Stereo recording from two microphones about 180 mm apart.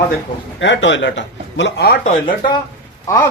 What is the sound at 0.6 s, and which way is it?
Speech, 90° left.